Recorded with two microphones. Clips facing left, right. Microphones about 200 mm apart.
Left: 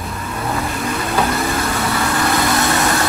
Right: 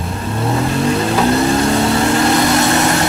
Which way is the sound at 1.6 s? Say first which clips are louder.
Right 6 dB; 25° right (ahead or behind).